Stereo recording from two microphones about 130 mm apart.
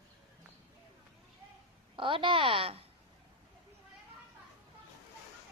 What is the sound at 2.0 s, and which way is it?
Speech, 40° right (ahead or behind).